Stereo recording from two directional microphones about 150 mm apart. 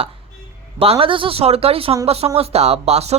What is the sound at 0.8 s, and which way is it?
Speech, 40° right (ahead or behind).